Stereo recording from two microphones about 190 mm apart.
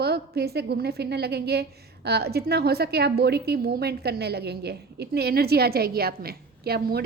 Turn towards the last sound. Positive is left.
turn(degrees=-55)  # may be behind; listen again after turning